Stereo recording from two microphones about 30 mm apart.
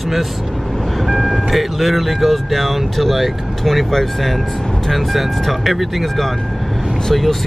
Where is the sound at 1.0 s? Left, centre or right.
Centre.